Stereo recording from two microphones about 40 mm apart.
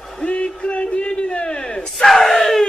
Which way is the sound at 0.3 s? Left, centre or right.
Left.